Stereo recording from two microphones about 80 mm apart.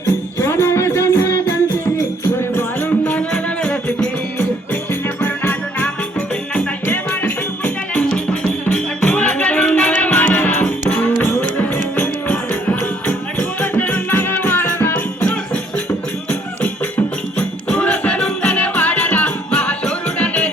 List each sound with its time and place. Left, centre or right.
0.4 s music: left
3.0 s music: centre
5.2 s music: left
17.3 s music: centre